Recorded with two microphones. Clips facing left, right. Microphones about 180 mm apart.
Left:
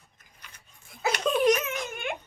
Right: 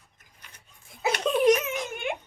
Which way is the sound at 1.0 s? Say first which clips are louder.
Right 1 dB; 25° right (ahead or behind).